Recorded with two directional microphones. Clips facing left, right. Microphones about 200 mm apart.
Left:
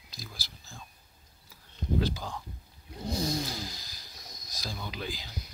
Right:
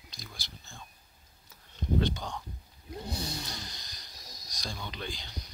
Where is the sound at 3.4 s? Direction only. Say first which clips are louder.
Left 5 dB; 5° left (ahead or behind).